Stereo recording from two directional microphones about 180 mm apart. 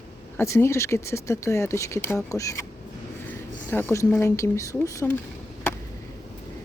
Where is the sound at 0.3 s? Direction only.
15° left (ahead or behind).